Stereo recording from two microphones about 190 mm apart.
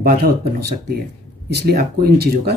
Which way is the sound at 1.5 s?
55° right (ahead or behind).